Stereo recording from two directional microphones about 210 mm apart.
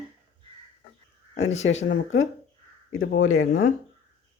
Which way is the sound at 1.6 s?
60° left (ahead or behind).